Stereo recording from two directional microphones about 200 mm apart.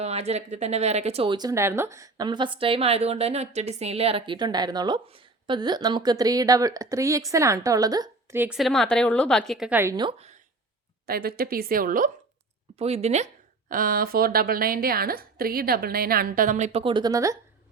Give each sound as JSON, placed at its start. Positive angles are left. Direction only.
{"t": 0.0, "sound": "speech", "side_deg": -30}
{"t": 9.9, "sound": "speech", "side_deg": -25}
{"t": 11.0, "sound": "a woman's voice", "side_deg": -50}
{"t": 12.8, "sound": "speech", "side_deg": -30}
{"t": 13.7, "sound": "a woman's voice", "side_deg": -45}